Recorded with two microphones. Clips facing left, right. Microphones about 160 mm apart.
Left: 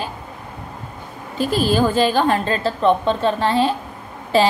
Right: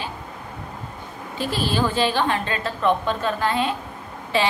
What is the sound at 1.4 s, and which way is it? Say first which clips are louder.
A woman's voice: left 6 dB; 45° left (ahead or behind).